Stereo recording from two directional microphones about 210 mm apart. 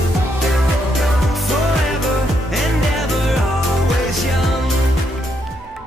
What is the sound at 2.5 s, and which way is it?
Music, centre (ahead or behind).